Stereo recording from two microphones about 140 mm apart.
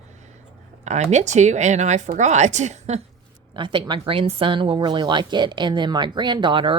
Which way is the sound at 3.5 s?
35° right (ahead or behind).